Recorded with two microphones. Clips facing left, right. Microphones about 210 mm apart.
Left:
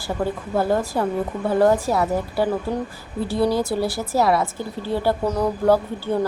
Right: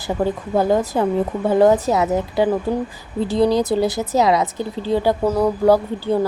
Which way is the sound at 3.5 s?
20° right (ahead or behind).